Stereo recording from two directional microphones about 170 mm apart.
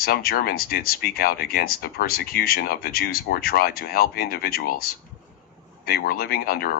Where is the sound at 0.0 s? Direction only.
60° left (ahead or behind).